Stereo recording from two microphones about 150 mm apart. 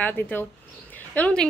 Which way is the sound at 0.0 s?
10° left (ahead or behind).